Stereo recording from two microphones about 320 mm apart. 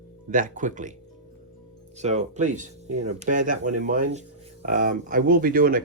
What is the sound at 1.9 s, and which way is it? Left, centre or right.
Speech, right.